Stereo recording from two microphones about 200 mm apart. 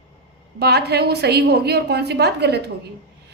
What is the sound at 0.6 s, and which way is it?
A woman's voice, 55° right (ahead or behind).